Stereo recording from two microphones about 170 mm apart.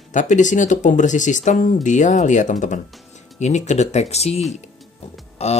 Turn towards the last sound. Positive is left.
turn(degrees=40)  # may be behind; listen again after turning